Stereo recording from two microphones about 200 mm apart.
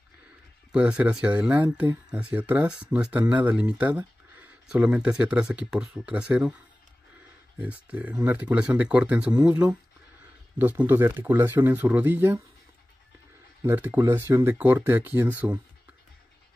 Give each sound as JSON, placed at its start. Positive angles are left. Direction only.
{"t": 0.7, "sound": "speech", "side_deg": -5}
{"t": 7.6, "sound": "speech", "side_deg": -5}
{"t": 9.3, "sound": "speech", "side_deg": -15}
{"t": 10.6, "sound": "speech", "side_deg": -10}
{"t": 13.7, "sound": "speech", "side_deg": -10}